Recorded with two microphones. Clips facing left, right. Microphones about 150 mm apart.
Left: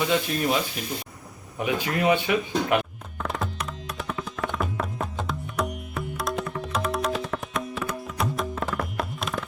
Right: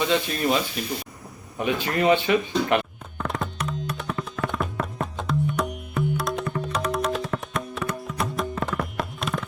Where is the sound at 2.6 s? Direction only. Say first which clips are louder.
Right 1 dB; 5° left (ahead or behind).